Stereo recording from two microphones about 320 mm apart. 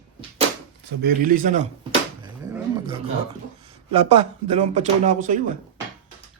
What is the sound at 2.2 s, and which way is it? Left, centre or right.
Roaring cats, centre.